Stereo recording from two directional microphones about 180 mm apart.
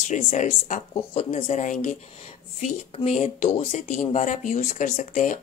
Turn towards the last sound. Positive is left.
turn(degrees=45)  # may be behind; listen again after turning